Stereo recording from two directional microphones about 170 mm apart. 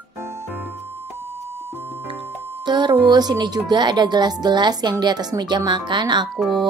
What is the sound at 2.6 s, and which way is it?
Music, 25° right (ahead or behind).